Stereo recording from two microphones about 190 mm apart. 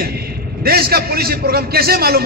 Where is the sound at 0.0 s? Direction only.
55° right (ahead or behind).